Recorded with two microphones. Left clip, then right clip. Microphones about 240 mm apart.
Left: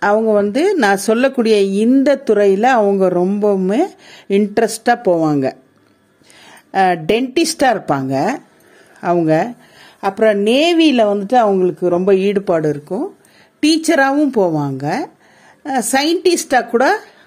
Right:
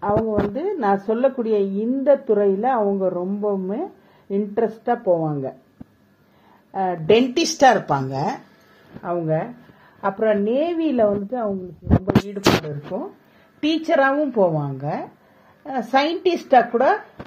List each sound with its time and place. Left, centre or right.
0.0 s speech: left
6.7 s speech: left
12.9 s speech: left